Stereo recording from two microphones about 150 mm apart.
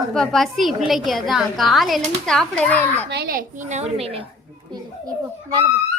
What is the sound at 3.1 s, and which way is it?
A woman's voice, 85° right.